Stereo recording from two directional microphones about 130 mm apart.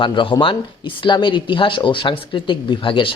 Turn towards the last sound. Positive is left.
turn(degrees=40)  # may be behind; listen again after turning